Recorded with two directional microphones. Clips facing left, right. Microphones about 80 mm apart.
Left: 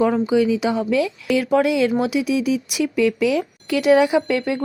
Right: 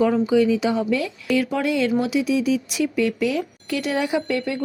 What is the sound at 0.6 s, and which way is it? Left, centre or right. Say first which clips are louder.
Speech: left 2 dB; left.